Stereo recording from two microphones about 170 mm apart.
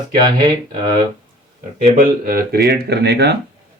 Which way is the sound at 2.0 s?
60° right (ahead or behind).